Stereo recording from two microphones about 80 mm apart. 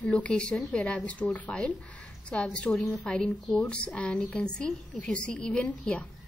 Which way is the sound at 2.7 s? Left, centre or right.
Centre.